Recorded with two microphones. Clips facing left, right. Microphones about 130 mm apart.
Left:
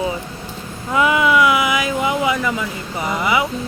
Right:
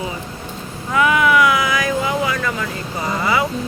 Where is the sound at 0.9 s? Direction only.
20° left (ahead or behind).